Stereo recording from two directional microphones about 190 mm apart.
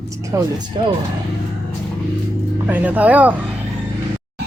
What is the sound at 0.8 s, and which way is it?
Speech, 25° right (ahead or behind).